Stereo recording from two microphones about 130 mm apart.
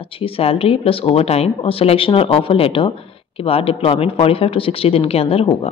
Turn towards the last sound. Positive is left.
turn(degrees=50)  # may be behind; listen again after turning